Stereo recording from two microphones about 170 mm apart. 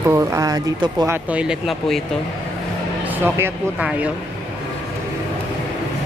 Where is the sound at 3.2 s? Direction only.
15° right (ahead or behind).